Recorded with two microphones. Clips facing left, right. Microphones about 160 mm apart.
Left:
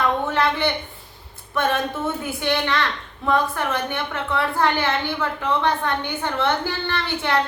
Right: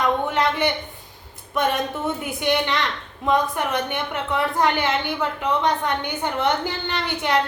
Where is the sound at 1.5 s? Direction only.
15° right (ahead or behind).